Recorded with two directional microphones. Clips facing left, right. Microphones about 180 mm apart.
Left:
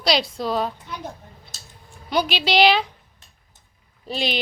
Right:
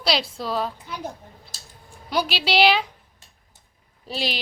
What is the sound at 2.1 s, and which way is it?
Speech, 5° right (ahead or behind).